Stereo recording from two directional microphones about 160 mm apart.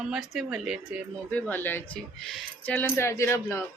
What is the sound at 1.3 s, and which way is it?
Speech, 10° left (ahead or behind).